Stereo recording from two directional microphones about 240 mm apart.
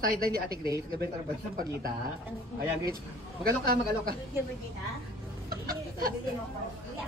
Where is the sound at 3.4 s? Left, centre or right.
Right.